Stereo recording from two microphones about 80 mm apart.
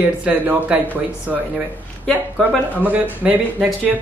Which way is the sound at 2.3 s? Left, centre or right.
Centre.